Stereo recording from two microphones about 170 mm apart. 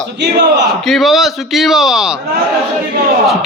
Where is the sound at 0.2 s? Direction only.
80° right.